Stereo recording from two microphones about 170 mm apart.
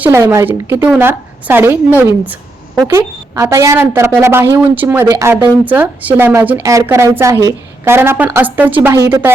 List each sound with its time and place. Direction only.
0.0 s speech: 15° right (ahead or behind)